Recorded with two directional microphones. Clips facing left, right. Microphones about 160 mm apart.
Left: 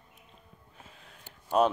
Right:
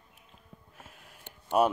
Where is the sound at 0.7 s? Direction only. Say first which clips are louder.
Left 2 dB; 5° right (ahead or behind).